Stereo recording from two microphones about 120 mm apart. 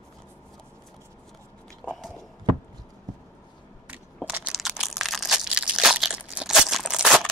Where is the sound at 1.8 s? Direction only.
Centre (ahead or behind).